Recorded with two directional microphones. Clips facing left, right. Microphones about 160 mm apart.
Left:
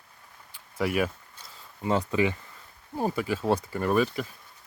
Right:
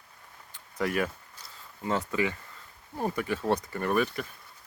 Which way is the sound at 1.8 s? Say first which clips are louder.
Left 4 dB; 20° left (ahead or behind).